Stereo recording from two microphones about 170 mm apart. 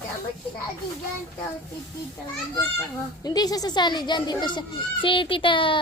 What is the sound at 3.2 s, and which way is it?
A child's voice, 25° left (ahead or behind).